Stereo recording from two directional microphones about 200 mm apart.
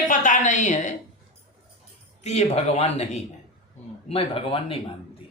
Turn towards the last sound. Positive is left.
turn(degrees=30)  # may be behind; listen again after turning